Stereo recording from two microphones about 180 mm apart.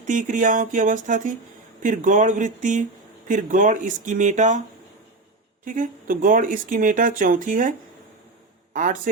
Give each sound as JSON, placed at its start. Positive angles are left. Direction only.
{"t": 0.1, "sound": "speech", "side_deg": -45}
{"t": 5.6, "sound": "speech", "side_deg": -45}